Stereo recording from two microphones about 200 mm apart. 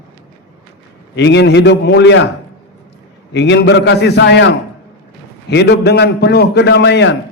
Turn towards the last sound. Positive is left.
turn(degrees=60)  # may be behind; listen again after turning